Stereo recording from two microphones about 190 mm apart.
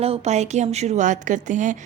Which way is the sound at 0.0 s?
35° right (ahead or behind).